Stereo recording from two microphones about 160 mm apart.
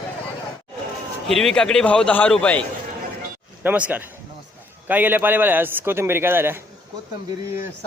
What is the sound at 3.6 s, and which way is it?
A man's voice, 10° right (ahead or behind).